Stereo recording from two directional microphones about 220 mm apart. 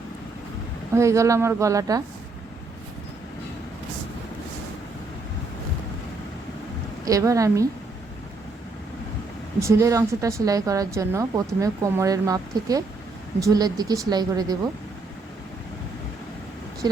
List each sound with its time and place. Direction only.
0.9 s a woman's voice: 15° right (ahead or behind)
7.0 s a woman's voice: 15° right (ahead or behind)
9.6 s a woman's voice: 15° right (ahead or behind)
16.8 s a woman's voice: 20° right (ahead or behind)